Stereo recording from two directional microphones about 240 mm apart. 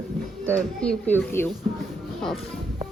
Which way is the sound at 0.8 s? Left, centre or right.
Centre.